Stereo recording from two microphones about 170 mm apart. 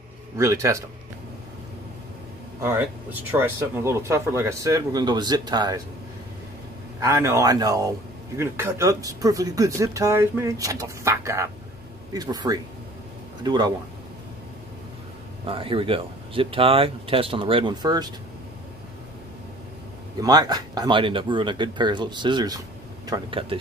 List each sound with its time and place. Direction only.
0.4 s speech: 15° right (ahead or behind)
2.6 s speech: 10° right (ahead or behind)
7.0 s a man's voice: 15° right (ahead or behind)
15.4 s speech: 30° right (ahead or behind)
20.2 s speech: 25° right (ahead or behind)